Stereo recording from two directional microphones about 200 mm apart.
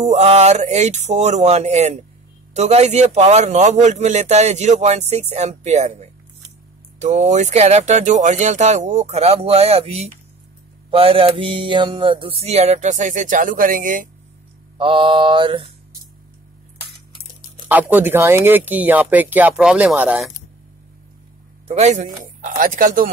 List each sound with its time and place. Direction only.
0.0 s a man's voice: 35° right (ahead or behind)
14.8 s mantra: 25° right (ahead or behind)
17.6 s speech: 10° right (ahead or behind)
21.6 s a man's voice: 30° right (ahead or behind)